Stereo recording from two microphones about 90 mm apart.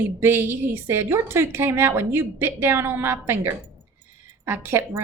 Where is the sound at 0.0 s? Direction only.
25° right (ahead or behind).